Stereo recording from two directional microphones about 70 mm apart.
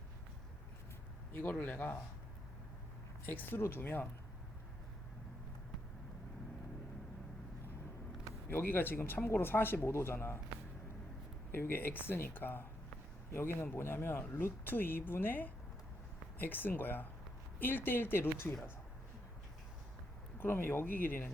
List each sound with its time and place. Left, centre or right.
1.3 s speech: left
3.2 s speech: left
8.4 s speech: left
11.5 s speech: left
20.4 s speech: left